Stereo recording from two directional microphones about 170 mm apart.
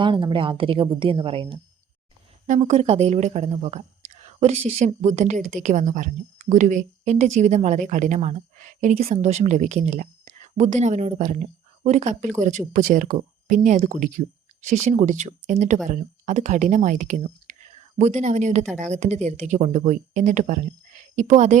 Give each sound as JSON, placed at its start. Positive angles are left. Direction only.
{"t": 0.0, "sound": "speech", "side_deg": -30}
{"t": 2.5, "sound": "speech", "side_deg": -45}